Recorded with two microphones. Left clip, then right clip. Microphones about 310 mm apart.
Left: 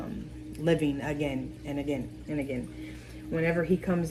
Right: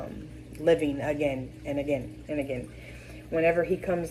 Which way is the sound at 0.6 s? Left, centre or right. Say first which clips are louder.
Right 4 dB; left.